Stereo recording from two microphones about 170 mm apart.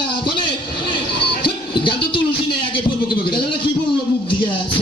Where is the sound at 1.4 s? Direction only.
30° left (ahead or behind).